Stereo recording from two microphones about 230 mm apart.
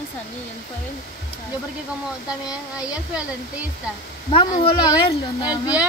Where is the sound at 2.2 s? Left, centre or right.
Centre.